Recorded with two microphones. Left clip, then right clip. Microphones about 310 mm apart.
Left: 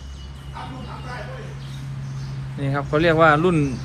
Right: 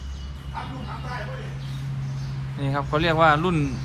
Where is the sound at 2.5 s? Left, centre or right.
Centre.